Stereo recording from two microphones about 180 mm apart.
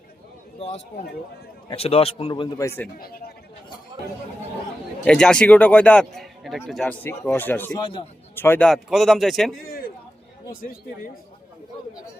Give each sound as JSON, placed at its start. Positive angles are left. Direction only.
{"t": 0.6, "sound": "a man's voice", "side_deg": 35}
{"t": 3.0, "sound": "speech", "side_deg": 55}
{"t": 5.0, "sound": "a man's voice", "side_deg": 5}
{"t": 7.8, "sound": "a man's voice", "side_deg": 30}
{"t": 8.4, "sound": "a man's voice", "side_deg": 10}
{"t": 9.6, "sound": "a sound", "side_deg": 55}
{"t": 10.6, "sound": "speech", "side_deg": 50}